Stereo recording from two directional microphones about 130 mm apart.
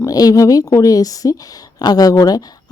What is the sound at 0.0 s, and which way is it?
Speech, 30° left (ahead or behind).